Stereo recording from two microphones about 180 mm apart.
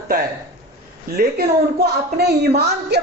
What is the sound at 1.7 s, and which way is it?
Speech, 65° right (ahead or behind).